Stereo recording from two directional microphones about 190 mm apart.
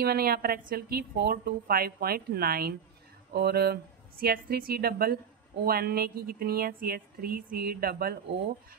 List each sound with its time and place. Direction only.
0.0 s a woman's voice: 55° right (ahead or behind)